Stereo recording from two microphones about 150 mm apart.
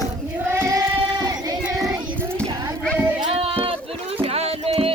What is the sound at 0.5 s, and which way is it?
Child singing, 20° right (ahead or behind).